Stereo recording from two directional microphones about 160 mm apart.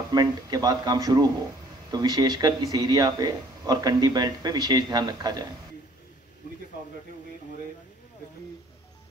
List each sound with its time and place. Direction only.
0.1 s speech: 25° right (ahead or behind)